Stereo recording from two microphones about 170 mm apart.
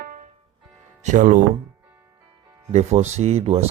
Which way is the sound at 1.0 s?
50° right (ahead or behind).